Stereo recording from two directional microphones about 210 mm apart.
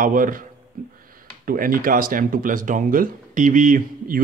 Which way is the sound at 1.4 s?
40° right (ahead or behind).